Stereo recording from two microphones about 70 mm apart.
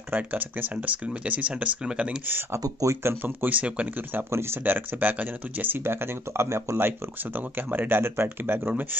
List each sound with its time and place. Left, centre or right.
0.1 s speech: right
2.2 s speech: right
2.6 s speech: right
3.0 s speech: right
3.4 s speech: right
4.3 s speech: right
7.3 s speech: right